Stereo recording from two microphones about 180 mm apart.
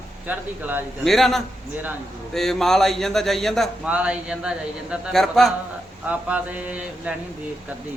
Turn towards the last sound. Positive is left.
turn(degrees=-5)  # may be behind; listen again after turning